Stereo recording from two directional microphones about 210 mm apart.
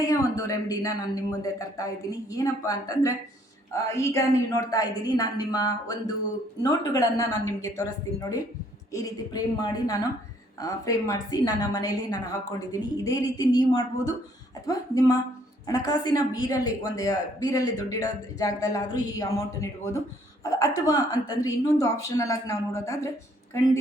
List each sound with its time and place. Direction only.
0.0 s a woman's voice: 15° left (ahead or behind)
8.9 s a woman's voice: 15° left (ahead or behind)